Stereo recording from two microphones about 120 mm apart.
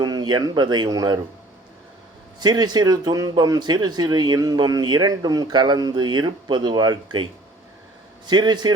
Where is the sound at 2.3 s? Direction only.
35° right (ahead or behind).